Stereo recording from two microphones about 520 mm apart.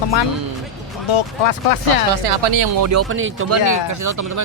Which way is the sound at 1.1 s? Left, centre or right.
Left.